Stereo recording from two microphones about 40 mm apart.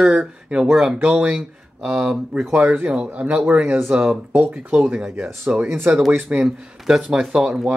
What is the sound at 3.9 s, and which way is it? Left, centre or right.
Speech, right.